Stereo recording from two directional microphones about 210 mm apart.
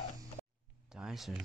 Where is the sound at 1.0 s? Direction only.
Centre (ahead or behind).